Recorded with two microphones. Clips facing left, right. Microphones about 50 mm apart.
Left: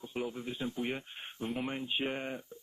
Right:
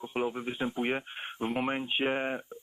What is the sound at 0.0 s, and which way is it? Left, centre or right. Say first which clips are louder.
Speech: right 6 dB; right.